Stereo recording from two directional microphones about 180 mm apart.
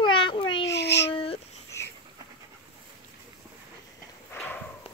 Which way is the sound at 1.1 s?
30° left (ahead or behind).